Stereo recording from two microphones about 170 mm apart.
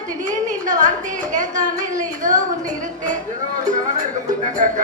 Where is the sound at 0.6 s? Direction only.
45° right (ahead or behind).